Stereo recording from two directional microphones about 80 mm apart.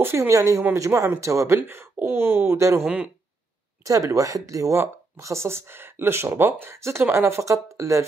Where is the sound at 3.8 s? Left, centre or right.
Right.